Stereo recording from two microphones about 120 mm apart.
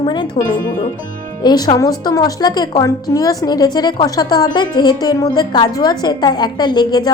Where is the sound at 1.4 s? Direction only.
35° left (ahead or behind).